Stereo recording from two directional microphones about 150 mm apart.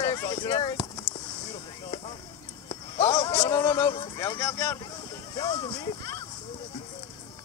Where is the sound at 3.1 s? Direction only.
20° left (ahead or behind).